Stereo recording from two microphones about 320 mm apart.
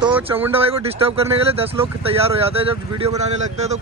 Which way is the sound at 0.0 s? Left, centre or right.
Centre.